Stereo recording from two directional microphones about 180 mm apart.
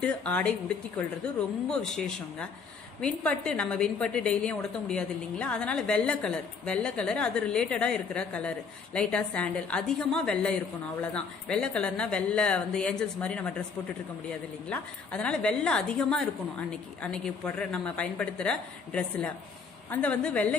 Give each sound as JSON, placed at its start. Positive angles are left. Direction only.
{"t": 0.0, "sound": "a woman's voice", "side_deg": 5}
{"t": 14.7, "sound": "a woman's voice", "side_deg": 5}